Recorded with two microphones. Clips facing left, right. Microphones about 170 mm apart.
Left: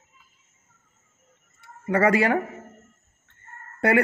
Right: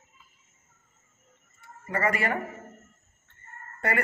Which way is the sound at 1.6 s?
80° left.